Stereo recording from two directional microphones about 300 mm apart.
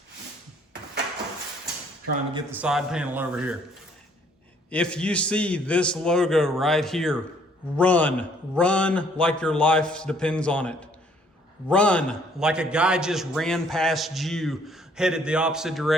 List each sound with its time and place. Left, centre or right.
2.6 s a man's voice: centre
4.7 s a man's voice: centre